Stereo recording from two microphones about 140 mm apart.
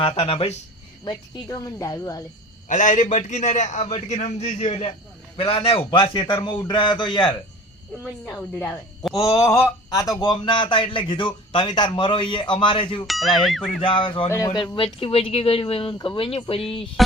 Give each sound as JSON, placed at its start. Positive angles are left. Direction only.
{"t": 0.0, "sound": "speech", "side_deg": 45}
{"t": 1.0, "sound": "speech", "side_deg": 30}
{"t": 2.6, "sound": "a man's voice", "side_deg": 65}
{"t": 8.3, "sound": "speech", "side_deg": 15}
{"t": 13.1, "sound": "speech", "side_deg": 0}
{"t": 13.8, "sound": "speech", "side_deg": 40}
{"t": 14.3, "sound": "speech", "side_deg": 25}
{"t": 14.8, "sound": "speech", "side_deg": 45}